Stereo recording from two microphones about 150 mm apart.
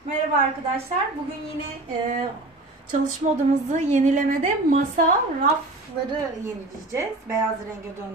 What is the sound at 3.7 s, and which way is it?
Speech, 55° right (ahead or behind).